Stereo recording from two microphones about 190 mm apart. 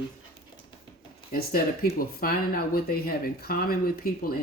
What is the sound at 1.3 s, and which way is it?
Speech, 50° left (ahead or behind).